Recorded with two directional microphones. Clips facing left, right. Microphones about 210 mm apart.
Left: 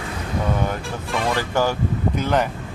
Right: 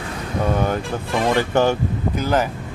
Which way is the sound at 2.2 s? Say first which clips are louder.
Right 2 dB; 5° right (ahead or behind).